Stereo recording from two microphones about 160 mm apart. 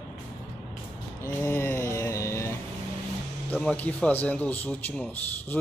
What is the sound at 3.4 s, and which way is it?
Speech, 10° left (ahead or behind).